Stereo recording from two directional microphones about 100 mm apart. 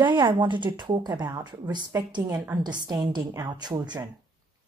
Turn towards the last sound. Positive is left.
turn(degrees=-45)  # may be behind; listen again after turning